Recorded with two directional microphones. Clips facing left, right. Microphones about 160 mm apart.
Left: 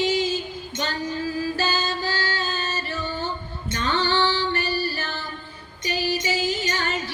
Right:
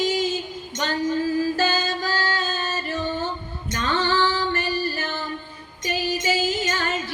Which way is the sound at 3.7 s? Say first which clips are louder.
Right 1 dB; 40° right (ahead or behind).